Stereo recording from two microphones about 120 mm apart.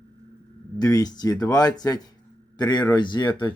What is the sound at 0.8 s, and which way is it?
Speech, 30° left (ahead or behind).